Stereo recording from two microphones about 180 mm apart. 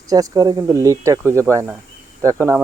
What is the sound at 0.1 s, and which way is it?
Speech, 20° right (ahead or behind).